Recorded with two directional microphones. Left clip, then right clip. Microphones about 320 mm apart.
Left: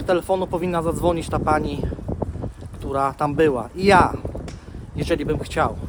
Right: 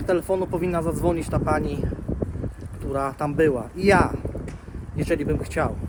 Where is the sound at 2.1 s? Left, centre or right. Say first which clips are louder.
Left 4 dB; centre.